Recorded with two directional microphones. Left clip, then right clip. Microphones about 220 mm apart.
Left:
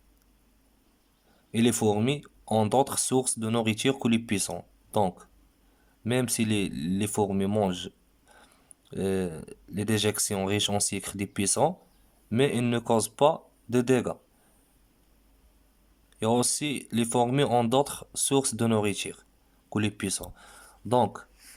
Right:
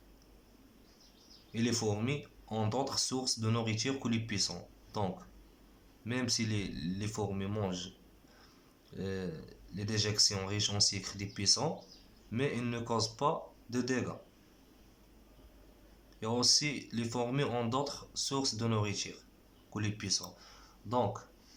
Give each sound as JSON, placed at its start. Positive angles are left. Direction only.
{"t": 1.5, "sound": "speech", "side_deg": 50}
{"t": 8.9, "sound": "speech", "side_deg": 45}
{"t": 16.2, "sound": "speech", "side_deg": 50}